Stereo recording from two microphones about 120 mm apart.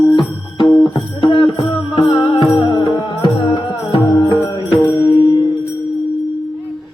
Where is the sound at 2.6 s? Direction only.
40° left (ahead or behind).